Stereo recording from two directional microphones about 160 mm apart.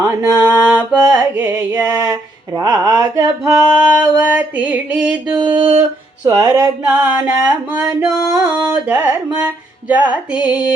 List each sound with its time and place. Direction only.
0.0 s mantra: 15° right (ahead or behind)
2.6 s a sound: 20° right (ahead or behind)
4.3 s mantra: 10° right (ahead or behind)
6.2 s a sound: 20° right (ahead or behind)
6.8 s mantra: 10° right (ahead or behind)
8.5 s carnatic music: 10° right (ahead or behind)
9.9 s mantra: 10° right (ahead or behind)